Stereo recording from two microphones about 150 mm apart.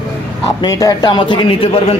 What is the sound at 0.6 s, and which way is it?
Speech, 25° left (ahead or behind).